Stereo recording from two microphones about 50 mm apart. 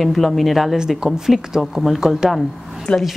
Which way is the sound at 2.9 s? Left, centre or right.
Left.